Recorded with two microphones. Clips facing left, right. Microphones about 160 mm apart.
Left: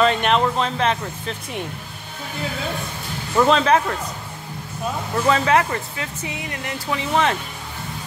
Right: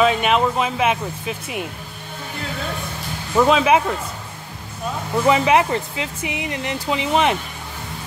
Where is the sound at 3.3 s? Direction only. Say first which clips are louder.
Right 1 dB; 5° right (ahead or behind).